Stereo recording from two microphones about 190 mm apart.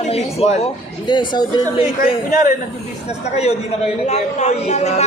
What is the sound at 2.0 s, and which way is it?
Speech, 45° left (ahead or behind).